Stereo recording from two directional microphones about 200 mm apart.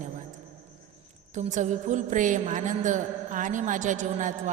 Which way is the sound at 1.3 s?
35° right (ahead or behind).